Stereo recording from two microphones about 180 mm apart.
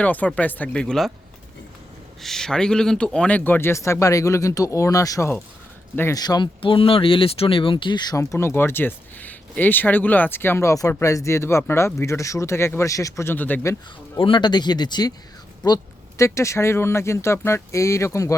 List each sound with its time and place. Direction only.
0.0 s speech: 10° left (ahead or behind)
2.2 s speech: centre (ahead or behind)
14.2 s speech: 25° left (ahead or behind)